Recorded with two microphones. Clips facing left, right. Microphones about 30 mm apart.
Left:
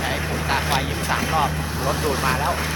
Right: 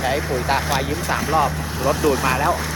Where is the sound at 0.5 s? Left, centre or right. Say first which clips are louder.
Right 1 dB; left.